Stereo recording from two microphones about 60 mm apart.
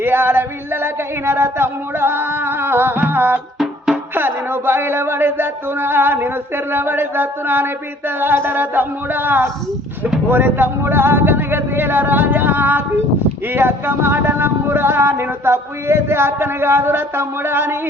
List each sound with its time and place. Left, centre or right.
0.0 s music: right
4.1 s a sound: right
10.2 s speech: right